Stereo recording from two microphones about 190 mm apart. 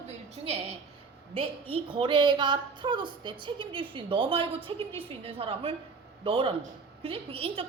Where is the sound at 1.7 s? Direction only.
25° right (ahead or behind).